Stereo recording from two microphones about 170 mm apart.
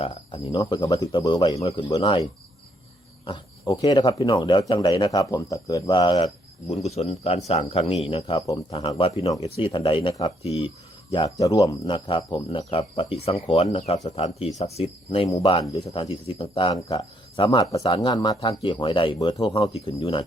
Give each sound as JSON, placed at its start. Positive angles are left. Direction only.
{"t": 0.0, "sound": "speech", "side_deg": 30}
{"t": 3.7, "sound": "speech", "side_deg": 25}
{"t": 6.7, "sound": "speech", "side_deg": 40}
{"t": 8.4, "sound": "speech", "side_deg": 20}
{"t": 8.9, "sound": "speech", "side_deg": 30}